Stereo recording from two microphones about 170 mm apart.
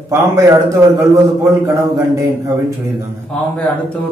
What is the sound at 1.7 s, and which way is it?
Speech, 20° right (ahead or behind).